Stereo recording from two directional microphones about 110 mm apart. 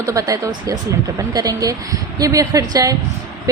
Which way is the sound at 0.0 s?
30° right (ahead or behind).